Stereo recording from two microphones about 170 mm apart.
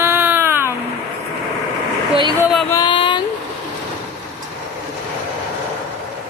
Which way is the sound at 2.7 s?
25° left (ahead or behind).